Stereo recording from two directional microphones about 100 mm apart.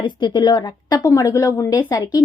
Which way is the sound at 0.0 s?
50° left (ahead or behind).